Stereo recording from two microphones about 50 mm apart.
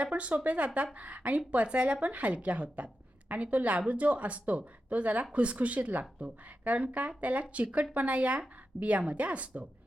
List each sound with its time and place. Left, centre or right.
0.0 s a woman's voice: right